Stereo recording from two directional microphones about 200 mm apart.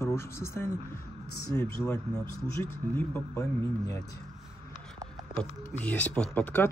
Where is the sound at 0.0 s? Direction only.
15° left (ahead or behind).